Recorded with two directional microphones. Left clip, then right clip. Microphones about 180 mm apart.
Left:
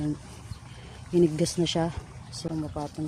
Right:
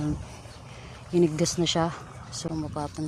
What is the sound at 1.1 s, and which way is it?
Speech, 15° left (ahead or behind).